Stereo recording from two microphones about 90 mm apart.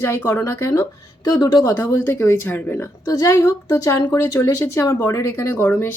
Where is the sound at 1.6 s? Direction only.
30° left (ahead or behind).